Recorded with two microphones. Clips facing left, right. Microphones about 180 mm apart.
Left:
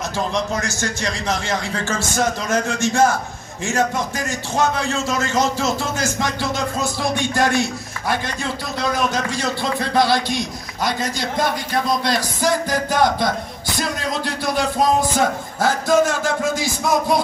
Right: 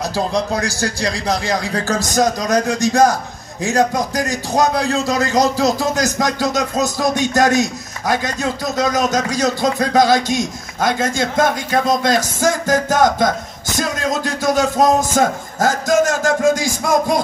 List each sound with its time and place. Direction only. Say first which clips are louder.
0.2 s a man's voice: right 3 dB; 35° right (ahead or behind)